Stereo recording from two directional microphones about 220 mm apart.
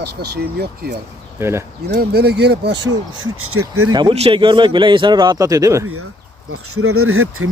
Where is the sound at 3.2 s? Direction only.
75° right (ahead or behind).